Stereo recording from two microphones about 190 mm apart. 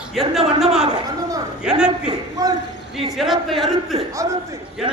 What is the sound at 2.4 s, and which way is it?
Speech, 20° right (ahead or behind).